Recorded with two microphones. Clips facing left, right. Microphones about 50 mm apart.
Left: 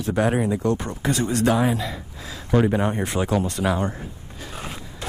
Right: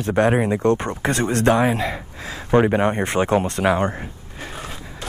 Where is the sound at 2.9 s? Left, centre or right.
Right.